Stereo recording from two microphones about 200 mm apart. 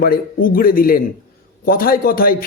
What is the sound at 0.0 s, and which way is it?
A man's voice, 45° left (ahead or behind).